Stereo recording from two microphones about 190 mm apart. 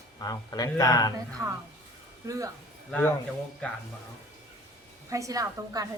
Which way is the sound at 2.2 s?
15° right (ahead or behind).